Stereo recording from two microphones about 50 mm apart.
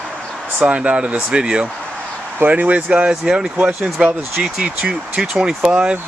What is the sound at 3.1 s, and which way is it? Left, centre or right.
Speech, centre.